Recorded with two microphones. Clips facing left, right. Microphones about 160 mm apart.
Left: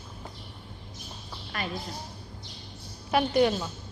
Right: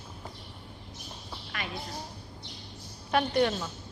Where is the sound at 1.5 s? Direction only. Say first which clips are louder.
Left 4 dB; 35° left (ahead or behind).